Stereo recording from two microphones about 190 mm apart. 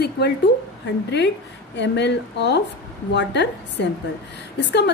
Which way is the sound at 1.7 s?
65° left (ahead or behind).